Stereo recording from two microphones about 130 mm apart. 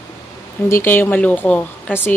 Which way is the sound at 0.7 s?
15° left (ahead or behind).